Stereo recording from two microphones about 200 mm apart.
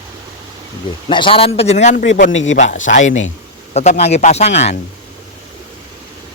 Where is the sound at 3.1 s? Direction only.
75° left (ahead or behind).